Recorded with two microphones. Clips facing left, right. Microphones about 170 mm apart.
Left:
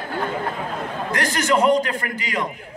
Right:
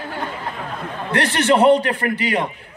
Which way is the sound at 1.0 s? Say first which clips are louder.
Right 5 dB; 30° right (ahead or behind).